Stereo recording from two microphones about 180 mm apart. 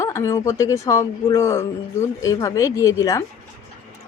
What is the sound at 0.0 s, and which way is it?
A woman's voice, 15° left (ahead or behind).